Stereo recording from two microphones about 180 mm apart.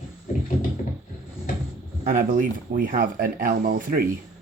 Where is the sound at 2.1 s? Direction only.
45° right (ahead or behind).